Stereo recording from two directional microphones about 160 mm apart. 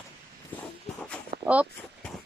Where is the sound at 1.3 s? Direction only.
25° right (ahead or behind).